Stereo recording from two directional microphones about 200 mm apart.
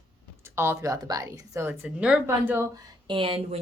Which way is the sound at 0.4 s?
10° right (ahead or behind).